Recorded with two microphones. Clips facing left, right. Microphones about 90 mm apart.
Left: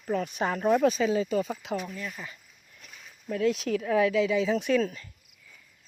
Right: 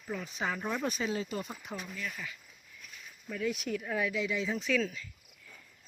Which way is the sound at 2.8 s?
70° left (ahead or behind).